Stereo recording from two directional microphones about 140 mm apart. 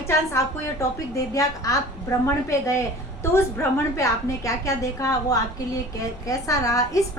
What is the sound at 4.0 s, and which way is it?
A woman's voice, 20° left (ahead or behind).